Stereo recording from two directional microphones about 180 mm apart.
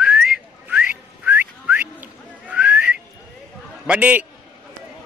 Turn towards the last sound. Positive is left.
turn(degrees=-10)  # may be behind; listen again after turning